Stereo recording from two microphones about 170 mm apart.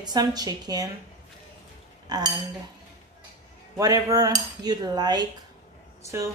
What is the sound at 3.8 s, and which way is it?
A woman's voice, 20° right (ahead or behind).